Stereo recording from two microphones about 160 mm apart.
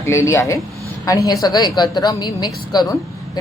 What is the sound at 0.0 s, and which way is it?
A woman's voice, 15° left (ahead or behind).